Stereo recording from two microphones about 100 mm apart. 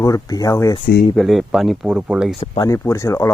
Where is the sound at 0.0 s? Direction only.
40° left (ahead or behind).